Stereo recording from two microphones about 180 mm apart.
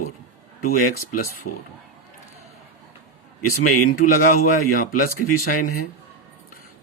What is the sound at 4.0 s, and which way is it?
Speech, 50° left (ahead or behind).